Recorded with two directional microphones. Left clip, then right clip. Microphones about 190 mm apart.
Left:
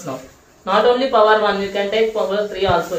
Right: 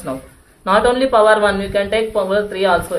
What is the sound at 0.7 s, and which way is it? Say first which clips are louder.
A woman's voice: right 1 dB; 50° right (ahead or behind).